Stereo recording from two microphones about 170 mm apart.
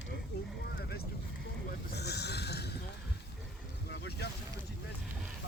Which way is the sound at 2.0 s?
75° left (ahead or behind).